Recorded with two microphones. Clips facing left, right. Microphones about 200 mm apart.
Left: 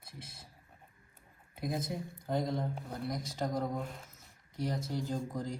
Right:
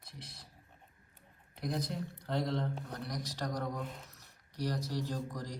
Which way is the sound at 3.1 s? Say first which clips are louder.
Left 4 dB; 25° left (ahead or behind).